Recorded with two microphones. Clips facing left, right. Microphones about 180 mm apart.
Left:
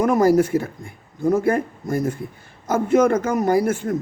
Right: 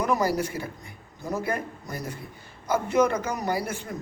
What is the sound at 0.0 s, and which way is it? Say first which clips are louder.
A man's voice: left 9 dB; 50° left (ahead or behind).